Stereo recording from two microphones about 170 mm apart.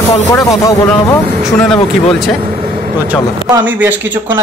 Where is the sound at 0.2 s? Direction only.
20° left (ahead or behind).